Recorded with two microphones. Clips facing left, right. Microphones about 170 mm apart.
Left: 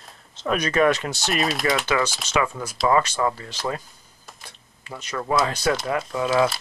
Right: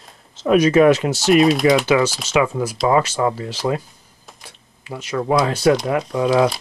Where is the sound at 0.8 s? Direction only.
15° right (ahead or behind).